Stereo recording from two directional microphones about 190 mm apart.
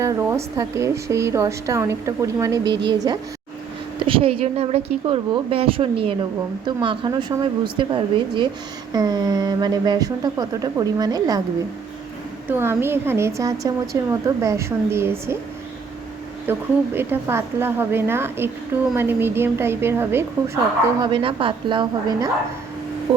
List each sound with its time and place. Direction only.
0.0 s speech: 15° right (ahead or behind)
12.5 s speech: 10° right (ahead or behind)
16.5 s speech: 10° right (ahead or behind)
21.0 s speech: 25° right (ahead or behind)